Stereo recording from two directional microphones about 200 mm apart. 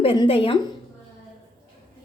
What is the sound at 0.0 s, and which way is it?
Speech, 25° left (ahead or behind).